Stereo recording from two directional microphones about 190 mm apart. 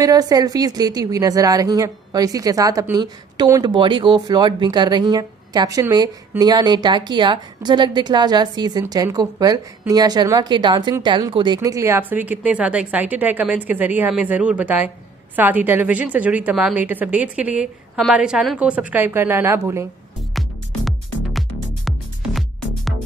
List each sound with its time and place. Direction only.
0.0 s a woman's voice: 20° right (ahead or behind)
20.3 s music: centre (ahead or behind)